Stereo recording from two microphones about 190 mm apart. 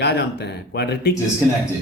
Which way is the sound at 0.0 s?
60° left (ahead or behind).